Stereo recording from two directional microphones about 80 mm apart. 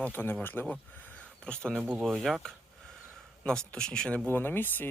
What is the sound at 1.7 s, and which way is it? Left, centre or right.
Speech, centre.